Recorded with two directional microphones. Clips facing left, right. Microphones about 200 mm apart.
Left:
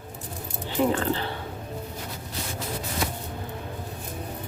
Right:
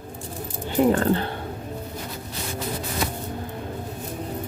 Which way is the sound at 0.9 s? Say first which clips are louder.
Right 5 dB; 50° right (ahead or behind).